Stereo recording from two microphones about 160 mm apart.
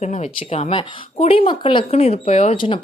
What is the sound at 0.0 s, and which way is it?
Speech, 45° left (ahead or behind).